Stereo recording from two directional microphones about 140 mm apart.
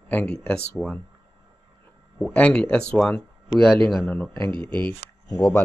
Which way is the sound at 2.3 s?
10° left (ahead or behind).